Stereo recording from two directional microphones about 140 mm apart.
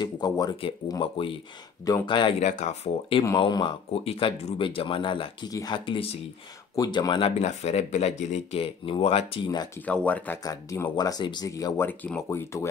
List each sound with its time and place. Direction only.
0.0 s speech: 30° left (ahead or behind)
2.4 s speech: 55° left (ahead or behind)
3.3 s speech: 35° left (ahead or behind)
10.0 s speech: 10° left (ahead or behind)
10.4 s speech: 25° left (ahead or behind)
11.9 s speech: 10° left (ahead or behind)